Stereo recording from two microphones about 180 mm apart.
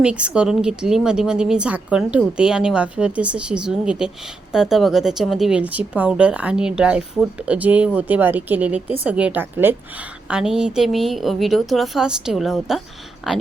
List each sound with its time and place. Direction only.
0.0 s speech: 5° right (ahead or behind)